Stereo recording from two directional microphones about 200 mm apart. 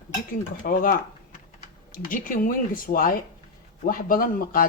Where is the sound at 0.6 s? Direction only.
45° left (ahead or behind).